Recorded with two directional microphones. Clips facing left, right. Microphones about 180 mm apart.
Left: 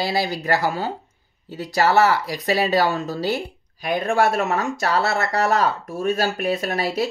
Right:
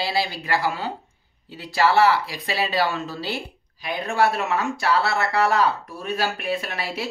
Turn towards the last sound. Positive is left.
turn(degrees=40)  # may be behind; listen again after turning